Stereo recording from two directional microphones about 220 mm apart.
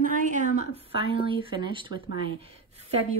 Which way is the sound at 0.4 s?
40° left (ahead or behind).